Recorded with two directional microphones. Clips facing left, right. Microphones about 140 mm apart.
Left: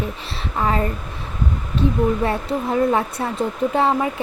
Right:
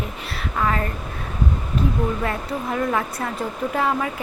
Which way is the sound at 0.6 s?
25° left (ahead or behind).